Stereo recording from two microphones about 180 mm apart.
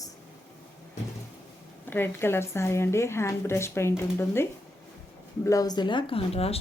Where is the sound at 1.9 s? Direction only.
10° left (ahead or behind).